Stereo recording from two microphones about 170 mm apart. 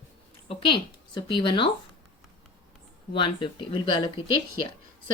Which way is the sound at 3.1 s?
30° left (ahead or behind).